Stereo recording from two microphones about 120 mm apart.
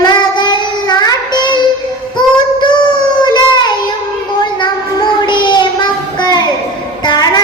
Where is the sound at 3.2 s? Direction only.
35° left (ahead or behind).